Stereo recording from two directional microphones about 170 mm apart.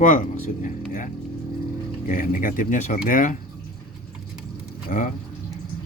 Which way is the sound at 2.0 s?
55° left (ahead or behind).